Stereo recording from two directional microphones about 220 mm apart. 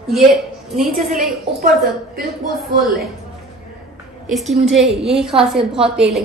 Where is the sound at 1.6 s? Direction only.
45° right (ahead or behind).